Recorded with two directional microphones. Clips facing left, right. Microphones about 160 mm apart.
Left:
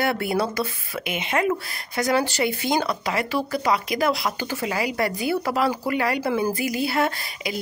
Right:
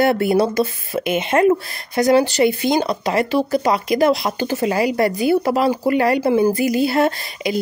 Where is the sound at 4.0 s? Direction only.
25° right (ahead or behind).